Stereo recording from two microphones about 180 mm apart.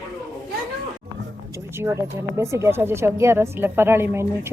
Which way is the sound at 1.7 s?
15° right (ahead or behind).